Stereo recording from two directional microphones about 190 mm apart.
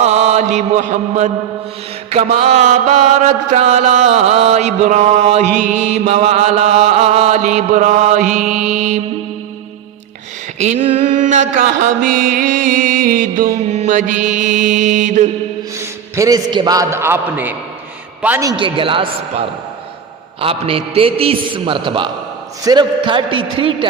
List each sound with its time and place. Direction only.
0.0 s chant: 35° right (ahead or behind)
2.1 s mantra: 35° right (ahead or behind)
10.6 s mantra: 35° right (ahead or behind)
15.8 s a man's voice: 15° right (ahead or behind)
20.4 s a man's voice: 30° right (ahead or behind)